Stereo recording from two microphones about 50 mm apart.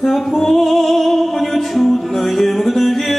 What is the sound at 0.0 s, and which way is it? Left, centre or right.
Music, centre.